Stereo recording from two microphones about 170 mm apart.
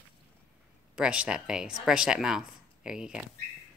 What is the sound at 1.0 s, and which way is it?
Speech, 5° right (ahead or behind).